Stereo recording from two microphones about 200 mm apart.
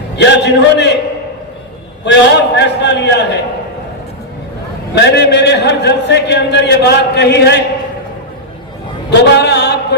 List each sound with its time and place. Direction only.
0.2 s a man's voice: 60° left (ahead or behind)
2.0 s a man's voice: 60° left (ahead or behind)
4.9 s a man's voice: 60° left (ahead or behind)
9.0 s a man's voice: 55° left (ahead or behind)